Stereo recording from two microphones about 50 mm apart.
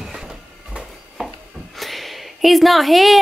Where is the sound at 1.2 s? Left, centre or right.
Centre.